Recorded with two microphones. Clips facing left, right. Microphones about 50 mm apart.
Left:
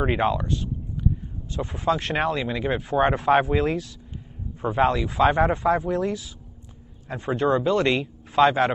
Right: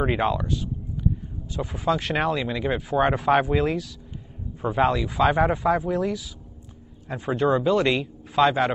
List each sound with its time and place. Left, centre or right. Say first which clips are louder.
0.0 s speech: left 1 dB; centre